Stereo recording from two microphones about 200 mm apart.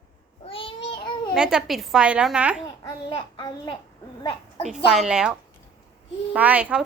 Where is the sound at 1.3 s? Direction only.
5° right (ahead or behind).